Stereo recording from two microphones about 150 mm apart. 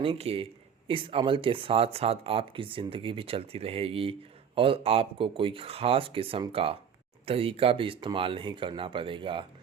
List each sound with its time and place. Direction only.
0.0 s speech: 40° right (ahead or behind)